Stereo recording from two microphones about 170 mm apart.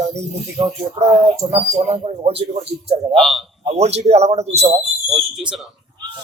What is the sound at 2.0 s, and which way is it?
Speech, 35° right (ahead or behind).